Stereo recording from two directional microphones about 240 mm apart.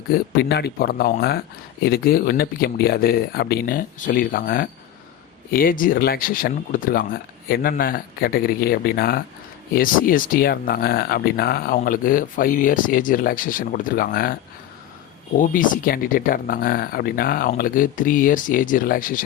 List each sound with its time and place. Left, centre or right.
0.1 s speech: left
15.4 s speech: left